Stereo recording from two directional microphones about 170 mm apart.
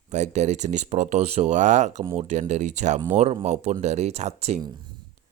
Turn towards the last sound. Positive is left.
turn(degrees=-25)  # may be behind; listen again after turning